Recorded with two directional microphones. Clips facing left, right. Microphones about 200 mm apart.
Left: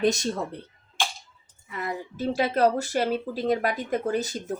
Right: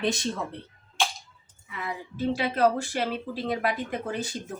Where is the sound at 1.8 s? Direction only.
40° left (ahead or behind).